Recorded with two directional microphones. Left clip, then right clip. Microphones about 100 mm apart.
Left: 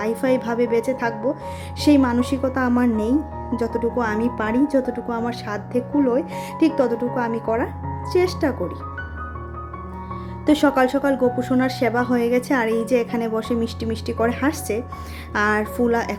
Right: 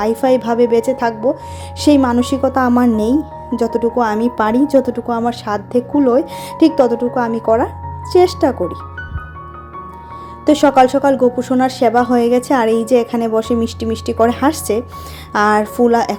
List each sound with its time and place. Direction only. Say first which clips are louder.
0.0 s a woman's voice: right 7 dB; 30° right (ahead or behind)
4.4 s a woman's voice: right 9 dB; 45° right (ahead or behind)
10.4 s a woman's voice: right 7 dB; 25° right (ahead or behind)